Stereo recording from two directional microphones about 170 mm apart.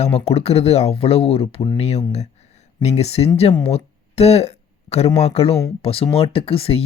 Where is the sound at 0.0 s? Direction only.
40° left (ahead or behind).